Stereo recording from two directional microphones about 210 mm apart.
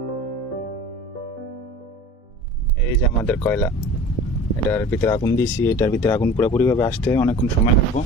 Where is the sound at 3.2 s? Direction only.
10° left (ahead or behind).